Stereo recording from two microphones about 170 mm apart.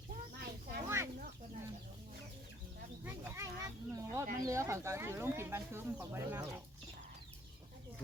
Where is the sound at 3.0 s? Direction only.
15° right (ahead or behind).